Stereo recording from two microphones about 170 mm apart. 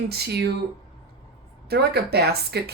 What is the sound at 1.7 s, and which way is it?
Speech, 70° right (ahead or behind).